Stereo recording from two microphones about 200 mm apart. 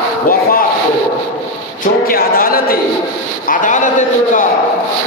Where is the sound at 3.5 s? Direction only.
40° left (ahead or behind).